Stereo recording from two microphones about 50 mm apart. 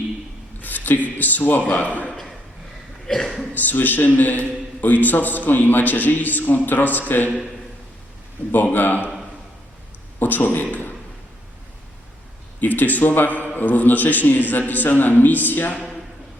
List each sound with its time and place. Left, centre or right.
0.6 s a man's voice: left
3.1 s speech: centre
3.5 s a man's voice: left
8.5 s a man's voice: left
10.2 s speech: left
12.5 s a man's voice: left